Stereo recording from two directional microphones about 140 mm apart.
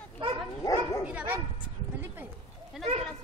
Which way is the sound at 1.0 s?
10° right (ahead or behind).